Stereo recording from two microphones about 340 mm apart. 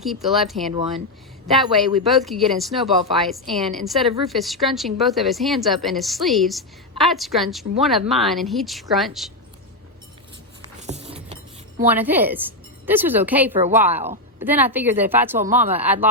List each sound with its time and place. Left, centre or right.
0.0 s a woman's voice: centre
2.0 s a woman's voice: centre
10.8 s vehicle: centre
11.9 s a woman's voice: centre
13.5 s a woman's voice: centre
13.7 s a woman's voice: centre